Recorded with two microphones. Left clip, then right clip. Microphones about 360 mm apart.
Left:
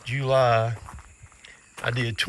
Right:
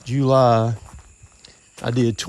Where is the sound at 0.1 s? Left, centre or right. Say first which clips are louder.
Right 8 dB; right.